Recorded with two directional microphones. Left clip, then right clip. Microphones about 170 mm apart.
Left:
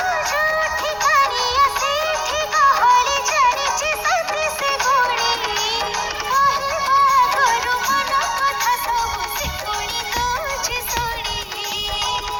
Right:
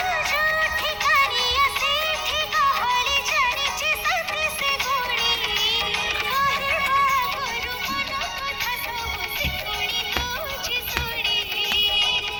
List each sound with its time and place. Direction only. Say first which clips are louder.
0.1 s music: left 3 dB; 30° left (ahead or behind)
6.3 s a sound: left 7 dB; 25° left (ahead or behind)
7.3 s music: left 10 dB; 50° left (ahead or behind)